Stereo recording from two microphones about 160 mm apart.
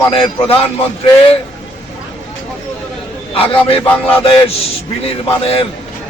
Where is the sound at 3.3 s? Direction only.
35° left (ahead or behind).